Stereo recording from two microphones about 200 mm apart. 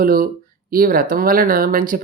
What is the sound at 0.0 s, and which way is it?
Speech, 45° right (ahead or behind).